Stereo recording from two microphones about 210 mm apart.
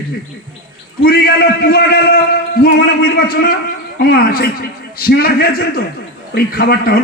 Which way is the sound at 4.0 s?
45° left (ahead or behind).